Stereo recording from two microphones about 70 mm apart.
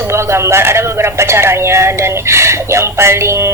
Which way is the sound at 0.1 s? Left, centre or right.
Right.